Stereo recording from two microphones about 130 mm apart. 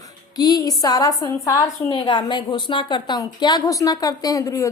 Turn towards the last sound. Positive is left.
turn(degrees=30)  # may be behind; listen again after turning